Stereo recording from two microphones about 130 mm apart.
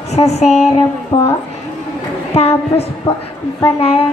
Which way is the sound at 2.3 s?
55° left (ahead or behind).